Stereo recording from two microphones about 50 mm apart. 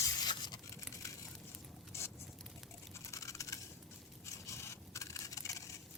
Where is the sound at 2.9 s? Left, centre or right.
Left.